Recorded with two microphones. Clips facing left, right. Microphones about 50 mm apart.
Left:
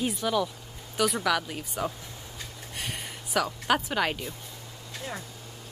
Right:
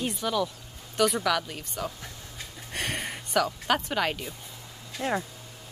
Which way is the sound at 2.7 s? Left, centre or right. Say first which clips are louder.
Right 6 dB; right.